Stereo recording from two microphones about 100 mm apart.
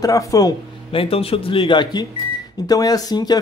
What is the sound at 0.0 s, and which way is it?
Speech, 35° left (ahead or behind).